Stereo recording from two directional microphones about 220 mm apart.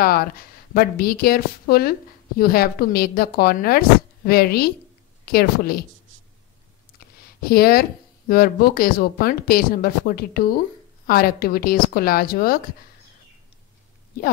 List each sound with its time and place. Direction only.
0.7 s a woman's voice: 45° left (ahead or behind)
7.4 s a woman's voice: 45° left (ahead or behind)